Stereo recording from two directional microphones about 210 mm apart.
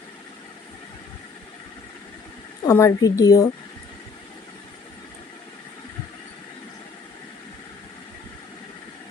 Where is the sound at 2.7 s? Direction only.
15° left (ahead or behind).